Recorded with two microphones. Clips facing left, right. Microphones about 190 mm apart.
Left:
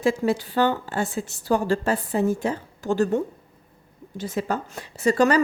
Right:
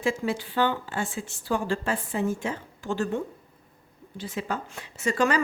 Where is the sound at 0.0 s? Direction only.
40° left (ahead or behind).